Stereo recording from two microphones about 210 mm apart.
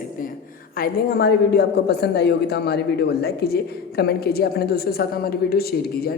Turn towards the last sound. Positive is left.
turn(degrees=50)  # may be behind; listen again after turning